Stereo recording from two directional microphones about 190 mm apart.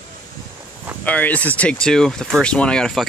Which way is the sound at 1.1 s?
10° left (ahead or behind).